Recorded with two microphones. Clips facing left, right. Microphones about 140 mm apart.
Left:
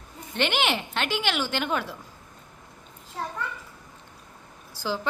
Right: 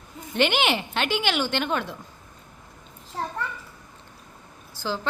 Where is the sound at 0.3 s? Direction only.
Centre (ahead or behind).